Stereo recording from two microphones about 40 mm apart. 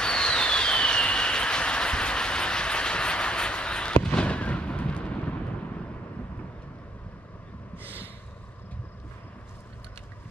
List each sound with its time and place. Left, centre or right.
0.0 s vehicle: left
4.0 s fireworks: left
7.8 s a sound: left